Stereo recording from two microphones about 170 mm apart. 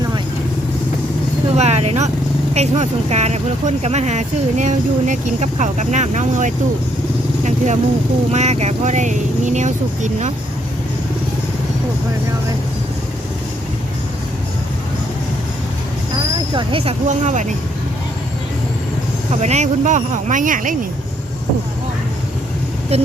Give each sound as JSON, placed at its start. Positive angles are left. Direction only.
{"t": 1.5, "sound": "speech", "side_deg": -40}
{"t": 16.6, "sound": "speech", "side_deg": -35}
{"t": 19.3, "sound": "speech", "side_deg": -40}
{"t": 22.9, "sound": "a sound", "side_deg": -35}